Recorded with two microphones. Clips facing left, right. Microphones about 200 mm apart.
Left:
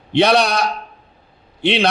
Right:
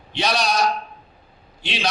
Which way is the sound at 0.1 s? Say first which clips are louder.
Left 8 dB; 60° left (ahead or behind).